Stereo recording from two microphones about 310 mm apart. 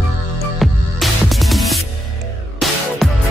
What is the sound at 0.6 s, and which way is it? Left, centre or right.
Music, centre.